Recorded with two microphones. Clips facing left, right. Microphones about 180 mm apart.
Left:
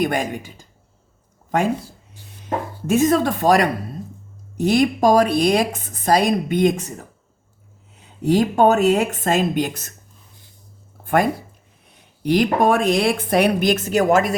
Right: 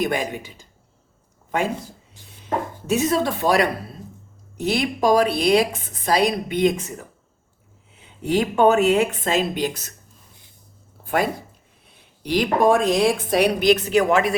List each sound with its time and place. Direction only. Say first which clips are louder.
0.0 s speech: left 2 dB; 50° left (ahead or behind)
2.8 s speech: left 5 dB; 50° left (ahead or behind)
7.9 s a woman's voice: left 4 dB; 40° left (ahead or behind)
11.0 s a sound: left 3 dB; 50° left (ahead or behind)
11.9 s speech: left 4 dB; 50° left (ahead or behind)